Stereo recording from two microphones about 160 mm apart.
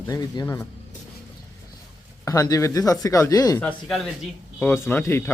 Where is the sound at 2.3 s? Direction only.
20° left (ahead or behind).